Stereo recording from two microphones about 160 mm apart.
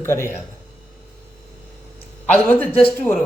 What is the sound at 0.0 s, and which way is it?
Speech, 15° left (ahead or behind).